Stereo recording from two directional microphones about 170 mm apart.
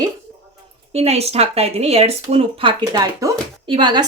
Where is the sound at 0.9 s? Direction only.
35° right (ahead or behind).